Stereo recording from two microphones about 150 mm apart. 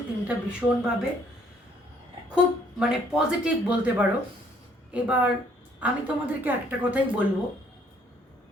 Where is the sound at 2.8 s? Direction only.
5° right (ahead or behind).